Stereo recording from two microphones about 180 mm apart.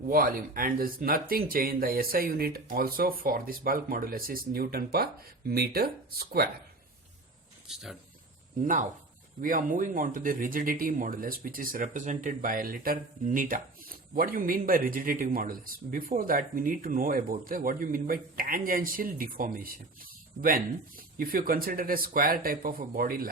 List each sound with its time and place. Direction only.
0.1 s speech: 55° right (ahead or behind)
7.7 s speech: centre (ahead or behind)
8.6 s speech: 45° right (ahead or behind)